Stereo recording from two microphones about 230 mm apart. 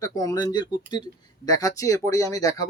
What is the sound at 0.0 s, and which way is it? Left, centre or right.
Speech, centre.